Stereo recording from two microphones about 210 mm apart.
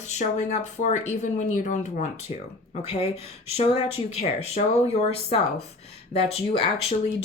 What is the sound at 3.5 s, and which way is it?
Speech, 30° left (ahead or behind).